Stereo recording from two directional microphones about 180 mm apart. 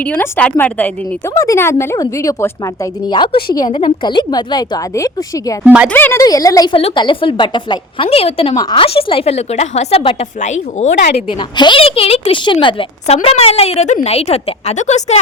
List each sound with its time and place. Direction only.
0.0 s speech: 10° left (ahead or behind)
3.5 s a woman's voice: 25° left (ahead or behind)
5.6 s speech: 5° right (ahead or behind)
5.9 s a woman's voice: 10° left (ahead or behind); by 10.8 s 40° left (ahead or behind)
11.1 s a woman's voice: 25° left (ahead or behind)